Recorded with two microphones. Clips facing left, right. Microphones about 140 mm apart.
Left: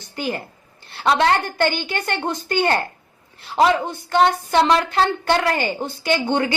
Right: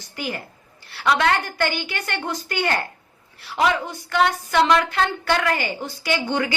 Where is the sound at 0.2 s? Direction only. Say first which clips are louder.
Left 4 dB; 25° left (ahead or behind).